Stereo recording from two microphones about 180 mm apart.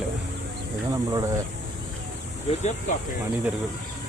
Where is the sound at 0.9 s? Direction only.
20° right (ahead or behind).